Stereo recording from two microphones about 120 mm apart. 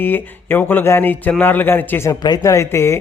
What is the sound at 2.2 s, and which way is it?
Speech, 30° left (ahead or behind).